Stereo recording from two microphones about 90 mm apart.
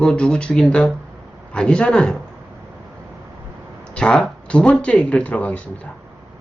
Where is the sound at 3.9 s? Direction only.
10° left (ahead or behind).